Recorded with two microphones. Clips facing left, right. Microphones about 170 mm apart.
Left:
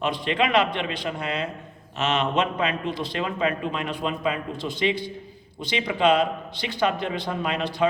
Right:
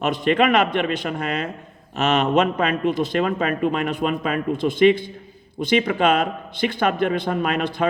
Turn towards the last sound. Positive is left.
turn(degrees=-50)  # may be behind; listen again after turning